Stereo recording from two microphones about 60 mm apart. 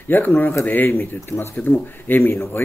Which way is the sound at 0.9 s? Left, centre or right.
Left.